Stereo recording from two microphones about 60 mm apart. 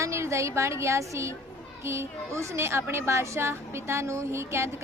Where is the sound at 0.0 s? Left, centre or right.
Right.